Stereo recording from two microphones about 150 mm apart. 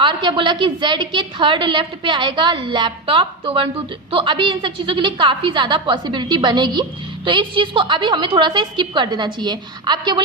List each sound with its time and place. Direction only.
0.0 s a woman's voice: 30° right (ahead or behind)